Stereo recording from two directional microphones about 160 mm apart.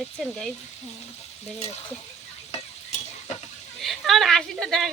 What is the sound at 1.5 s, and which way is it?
Frying, 40° left (ahead or behind).